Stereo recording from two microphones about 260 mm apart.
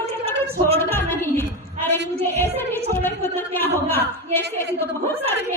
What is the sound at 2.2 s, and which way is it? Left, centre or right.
Music, centre.